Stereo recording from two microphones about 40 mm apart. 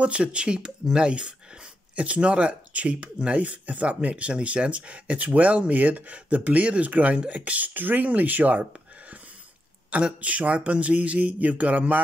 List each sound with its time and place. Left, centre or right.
0.0 s speech: right
6.1 s speech: right
9.8 s speech: right